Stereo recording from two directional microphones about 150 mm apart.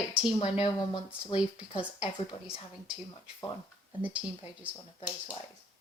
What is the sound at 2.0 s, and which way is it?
Speech, 35° left (ahead or behind).